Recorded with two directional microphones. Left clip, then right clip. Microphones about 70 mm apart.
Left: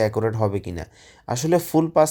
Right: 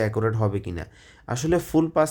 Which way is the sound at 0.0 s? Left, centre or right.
Left.